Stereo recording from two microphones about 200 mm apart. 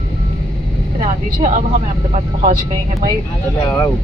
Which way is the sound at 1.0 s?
35° right (ahead or behind).